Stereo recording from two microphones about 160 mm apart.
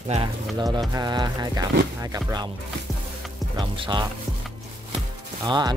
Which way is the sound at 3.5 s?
30° right (ahead or behind).